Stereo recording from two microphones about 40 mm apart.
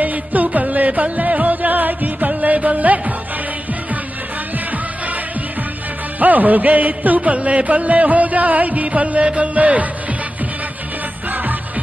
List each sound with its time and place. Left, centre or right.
0.0 s music: right
6.1 s music: right